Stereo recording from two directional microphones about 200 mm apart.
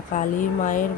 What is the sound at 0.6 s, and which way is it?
Speech, 40° left (ahead or behind).